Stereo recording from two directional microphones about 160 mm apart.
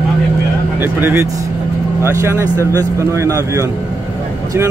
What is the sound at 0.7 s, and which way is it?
Speech, 15° right (ahead or behind).